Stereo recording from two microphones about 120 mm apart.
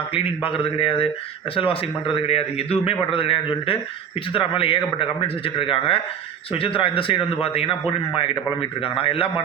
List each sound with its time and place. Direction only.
0.1 s a man's voice: 50° left (ahead or behind)